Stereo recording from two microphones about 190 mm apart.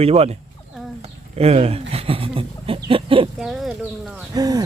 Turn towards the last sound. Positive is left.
turn(degrees=-20)  # may be behind; listen again after turning